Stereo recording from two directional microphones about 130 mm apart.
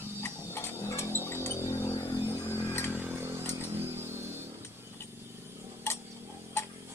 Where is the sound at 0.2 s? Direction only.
20° left (ahead or behind).